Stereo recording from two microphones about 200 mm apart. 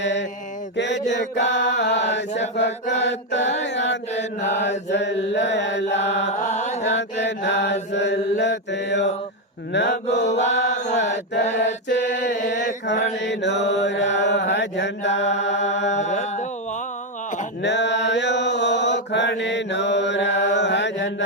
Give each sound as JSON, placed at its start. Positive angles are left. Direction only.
{"t": 0.0, "sound": "mantra", "side_deg": 60}
{"t": 4.1, "sound": "mantra", "side_deg": 35}
{"t": 4.6, "sound": "mantra", "side_deg": 60}
{"t": 6.3, "sound": "chant", "side_deg": 35}
{"t": 6.8, "sound": "mantra", "side_deg": 60}
{"t": 10.1, "sound": "mantra", "side_deg": 35}
{"t": 10.8, "sound": "mantra", "side_deg": 60}
{"t": 12.1, "sound": "mantra", "side_deg": 60}
{"t": 15.6, "sound": "mantra", "side_deg": 35}
{"t": 17.6, "sound": "mantra", "side_deg": 60}